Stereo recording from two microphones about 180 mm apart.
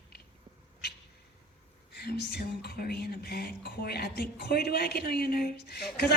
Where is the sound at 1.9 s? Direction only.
65° left (ahead or behind).